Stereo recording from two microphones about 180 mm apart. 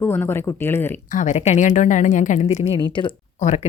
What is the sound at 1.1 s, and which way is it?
A woman's voice, 40° left (ahead or behind).